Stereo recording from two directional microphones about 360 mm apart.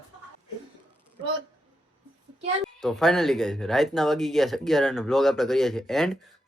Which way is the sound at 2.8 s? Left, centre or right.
Centre.